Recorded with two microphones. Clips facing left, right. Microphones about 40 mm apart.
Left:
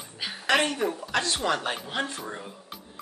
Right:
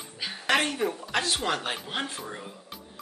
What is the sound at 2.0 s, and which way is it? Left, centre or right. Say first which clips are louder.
Speech: left 3 dB; centre.